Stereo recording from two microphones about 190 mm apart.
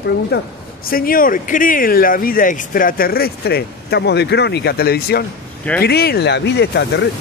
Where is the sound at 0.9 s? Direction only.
50° left (ahead or behind); by 7.0 s 65° left (ahead or behind).